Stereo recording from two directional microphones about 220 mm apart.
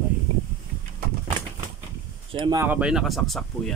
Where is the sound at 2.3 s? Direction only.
20° right (ahead or behind); by 3.7 s centre (ahead or behind).